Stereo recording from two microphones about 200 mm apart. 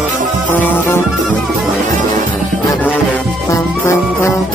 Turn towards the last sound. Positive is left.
turn(degrees=15)  # may be behind; listen again after turning